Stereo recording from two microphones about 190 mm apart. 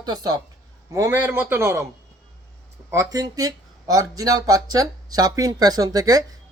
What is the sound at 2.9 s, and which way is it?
Speech, 20° right (ahead or behind).